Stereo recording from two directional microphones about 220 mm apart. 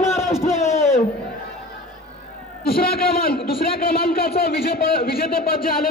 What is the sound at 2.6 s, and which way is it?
A man's voice, 45° left (ahead or behind).